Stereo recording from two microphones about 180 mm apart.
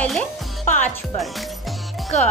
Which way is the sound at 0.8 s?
Centre (ahead or behind).